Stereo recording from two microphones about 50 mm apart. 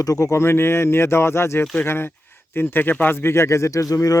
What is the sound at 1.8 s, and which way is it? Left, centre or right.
Speech, left.